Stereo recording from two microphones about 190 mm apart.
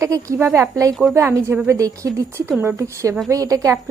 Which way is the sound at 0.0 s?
15° right (ahead or behind).